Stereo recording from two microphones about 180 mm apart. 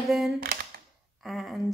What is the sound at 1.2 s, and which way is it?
Speech, centre (ahead or behind).